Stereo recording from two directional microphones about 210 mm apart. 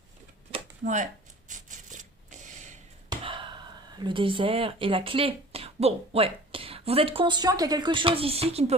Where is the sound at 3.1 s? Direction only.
25° right (ahead or behind).